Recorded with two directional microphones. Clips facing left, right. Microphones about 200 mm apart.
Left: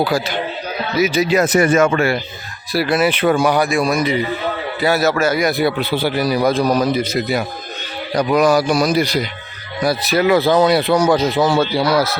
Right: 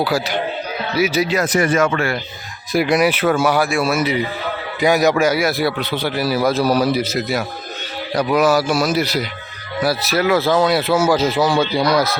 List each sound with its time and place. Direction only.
0.0 s speech: 10° right (ahead or behind)
1.4 s speech: 25° left (ahead or behind)
2.7 s a man's voice: 15° right (ahead or behind); by 12.2 s 5° left (ahead or behind)